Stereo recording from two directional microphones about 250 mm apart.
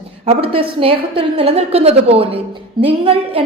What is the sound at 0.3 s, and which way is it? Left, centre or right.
A woman's voice, right.